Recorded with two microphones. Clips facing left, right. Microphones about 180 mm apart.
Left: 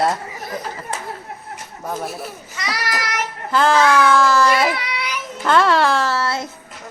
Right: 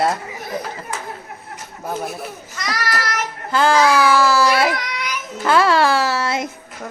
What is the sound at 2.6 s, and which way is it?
Child singing, 10° left (ahead or behind).